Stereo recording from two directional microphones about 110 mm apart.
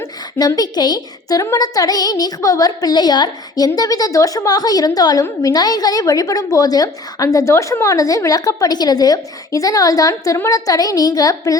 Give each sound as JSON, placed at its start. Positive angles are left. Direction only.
{"t": 0.0, "sound": "a woman's voice", "side_deg": 35}